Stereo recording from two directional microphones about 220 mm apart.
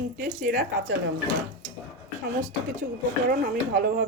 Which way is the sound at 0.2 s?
40° right (ahead or behind).